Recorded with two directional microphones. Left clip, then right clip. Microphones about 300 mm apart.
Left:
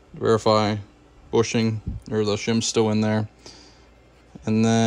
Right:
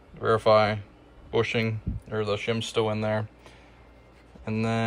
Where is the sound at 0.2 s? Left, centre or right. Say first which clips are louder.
Left 1 dB; centre.